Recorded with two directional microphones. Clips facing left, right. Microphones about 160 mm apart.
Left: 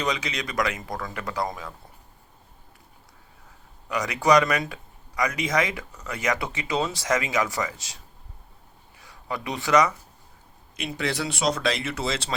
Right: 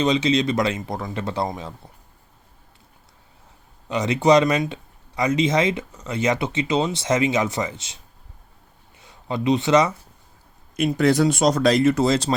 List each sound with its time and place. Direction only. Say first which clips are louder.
0.0 s speech: right 10 dB; 25° right (ahead or behind)
3.8 s speech: right 4 dB; 25° right (ahead or behind)
9.0 s speech: right 6 dB; 25° right (ahead or behind)
10.8 s speech: right 11 dB; 45° right (ahead or behind)